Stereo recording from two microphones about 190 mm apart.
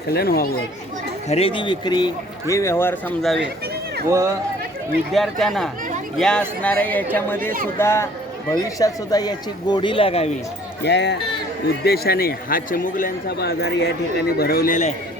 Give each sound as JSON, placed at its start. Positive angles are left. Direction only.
{"t": 0.1, "sound": "speech", "side_deg": 55}
{"t": 1.3, "sound": "speech", "side_deg": 30}
{"t": 3.2, "sound": "speech", "side_deg": 0}
{"t": 4.1, "sound": "speech", "side_deg": -15}
{"t": 5.1, "sound": "speech", "side_deg": 0}
{"t": 10.8, "sound": "a man's voice", "side_deg": 65}